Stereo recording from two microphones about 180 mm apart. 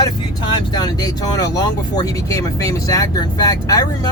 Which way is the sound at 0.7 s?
20° left (ahead or behind).